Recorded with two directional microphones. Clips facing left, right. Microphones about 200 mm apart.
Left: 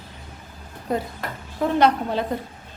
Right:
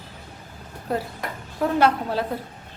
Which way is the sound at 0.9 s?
5° right (ahead or behind).